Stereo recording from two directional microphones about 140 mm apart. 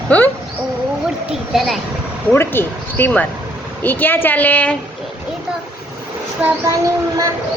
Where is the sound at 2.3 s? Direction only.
15° left (ahead or behind).